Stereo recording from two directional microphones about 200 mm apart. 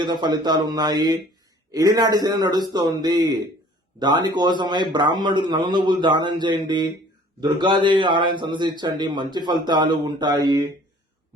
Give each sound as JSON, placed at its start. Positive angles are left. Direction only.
{"t": 0.0, "sound": "a man's voice", "side_deg": -20}